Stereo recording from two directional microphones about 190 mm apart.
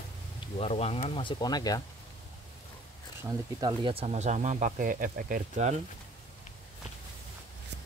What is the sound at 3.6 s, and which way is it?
Speech, 25° right (ahead or behind).